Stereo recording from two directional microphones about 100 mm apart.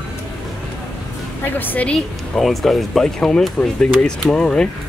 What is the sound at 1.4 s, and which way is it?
Speech, 20° left (ahead or behind).